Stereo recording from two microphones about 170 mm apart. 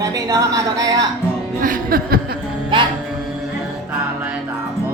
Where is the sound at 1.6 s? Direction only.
55° right (ahead or behind).